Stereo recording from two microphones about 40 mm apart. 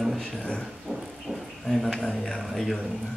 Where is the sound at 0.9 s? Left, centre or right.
Centre.